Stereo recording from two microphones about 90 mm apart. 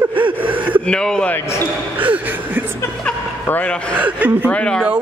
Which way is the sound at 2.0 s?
20° right (ahead or behind).